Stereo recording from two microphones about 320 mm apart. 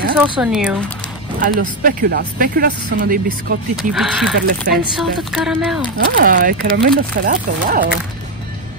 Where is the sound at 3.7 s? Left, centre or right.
Centre.